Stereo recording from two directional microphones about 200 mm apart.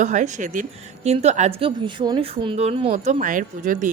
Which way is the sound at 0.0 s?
35° right (ahead or behind).